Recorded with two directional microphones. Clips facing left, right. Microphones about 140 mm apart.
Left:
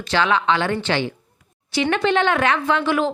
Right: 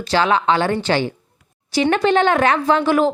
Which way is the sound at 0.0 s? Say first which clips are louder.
Right 3 dB; 35° right (ahead or behind).